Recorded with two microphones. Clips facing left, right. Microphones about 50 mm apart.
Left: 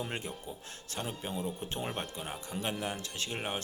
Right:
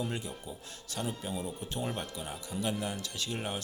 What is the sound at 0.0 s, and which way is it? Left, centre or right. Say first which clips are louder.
Speech: right 1 dB; left.